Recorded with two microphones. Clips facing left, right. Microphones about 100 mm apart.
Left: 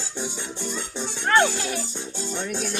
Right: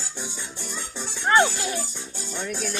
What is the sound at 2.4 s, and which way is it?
Music, centre (ahead or behind).